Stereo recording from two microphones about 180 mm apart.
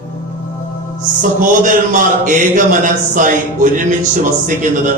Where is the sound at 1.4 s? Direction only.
45° right (ahead or behind).